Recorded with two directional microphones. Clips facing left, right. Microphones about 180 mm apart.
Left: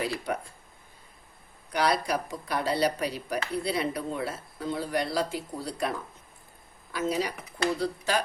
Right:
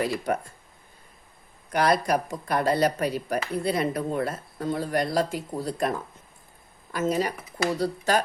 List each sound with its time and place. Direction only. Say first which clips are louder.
1.7 s speech: right 4 dB; 50° right (ahead or behind)
6.9 s speech: right 3 dB; 45° right (ahead or behind)